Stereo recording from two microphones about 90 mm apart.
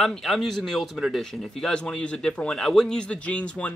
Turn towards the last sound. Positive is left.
turn(degrees=15)  # may be behind; listen again after turning